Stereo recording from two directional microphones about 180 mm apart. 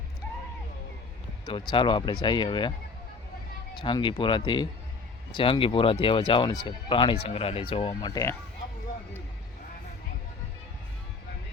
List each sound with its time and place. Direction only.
1.5 s speech: 25° left (ahead or behind)
3.8 s speech: 25° left (ahead or behind)